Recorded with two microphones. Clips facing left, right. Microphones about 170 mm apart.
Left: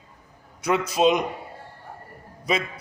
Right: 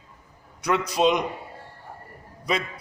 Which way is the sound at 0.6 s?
25° left (ahead or behind).